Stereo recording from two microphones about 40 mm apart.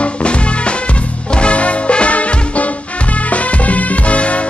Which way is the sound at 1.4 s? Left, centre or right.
Left.